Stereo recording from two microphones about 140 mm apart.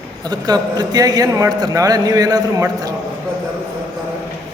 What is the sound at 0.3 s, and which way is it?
A man's voice, 30° right (ahead or behind).